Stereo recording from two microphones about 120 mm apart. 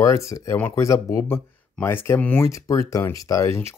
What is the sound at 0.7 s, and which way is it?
Speech, 25° left (ahead or behind).